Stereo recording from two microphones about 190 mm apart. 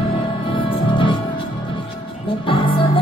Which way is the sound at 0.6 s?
25° left (ahead or behind).